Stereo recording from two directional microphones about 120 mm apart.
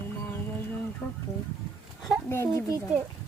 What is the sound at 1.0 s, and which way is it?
Speech, 30° left (ahead or behind).